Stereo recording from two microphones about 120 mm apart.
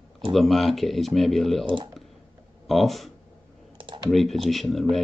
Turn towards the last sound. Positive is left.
turn(degrees=0)  # may be behind; listen again after turning